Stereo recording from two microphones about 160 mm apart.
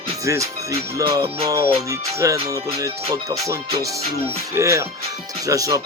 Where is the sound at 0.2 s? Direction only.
20° right (ahead or behind).